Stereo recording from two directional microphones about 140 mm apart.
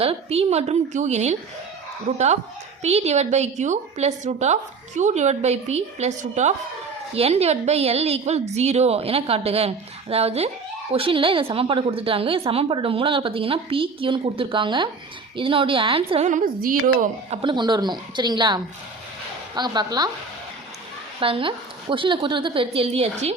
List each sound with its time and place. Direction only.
0.0 s a woman's voice: 45° right (ahead or behind)
16.2 s a woman's voice: 70° right (ahead or behind)
17.3 s a woman's voice: 35° right (ahead or behind)
21.2 s a woman's voice: 40° right (ahead or behind)